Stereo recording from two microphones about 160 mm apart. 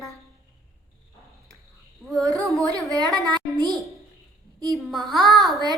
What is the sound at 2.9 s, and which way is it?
Speech, 25° right (ahead or behind).